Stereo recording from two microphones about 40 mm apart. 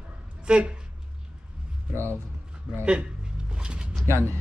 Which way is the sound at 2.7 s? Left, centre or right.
Right.